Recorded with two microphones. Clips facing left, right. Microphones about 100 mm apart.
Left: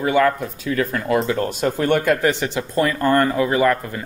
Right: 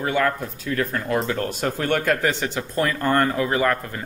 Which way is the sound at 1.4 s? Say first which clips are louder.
Left 4 dB; 20° left (ahead or behind).